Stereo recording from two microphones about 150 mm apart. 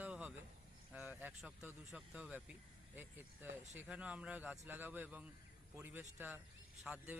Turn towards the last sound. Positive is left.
turn(degrees=-5)  # may be behind; listen again after turning